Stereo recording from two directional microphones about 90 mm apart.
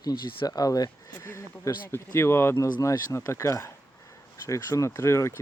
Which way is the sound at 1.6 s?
30° left (ahead or behind).